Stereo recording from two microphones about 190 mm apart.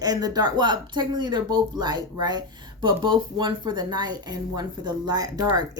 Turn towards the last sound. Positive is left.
turn(degrees=-20)  # may be behind; listen again after turning